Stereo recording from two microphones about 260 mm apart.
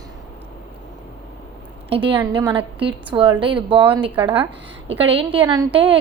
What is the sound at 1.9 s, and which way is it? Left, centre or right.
Speech, right.